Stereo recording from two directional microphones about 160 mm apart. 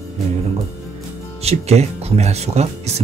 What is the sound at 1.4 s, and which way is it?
Speech, 40° right (ahead or behind).